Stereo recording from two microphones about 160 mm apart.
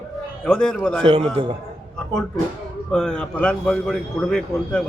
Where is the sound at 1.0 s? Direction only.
35° right (ahead or behind).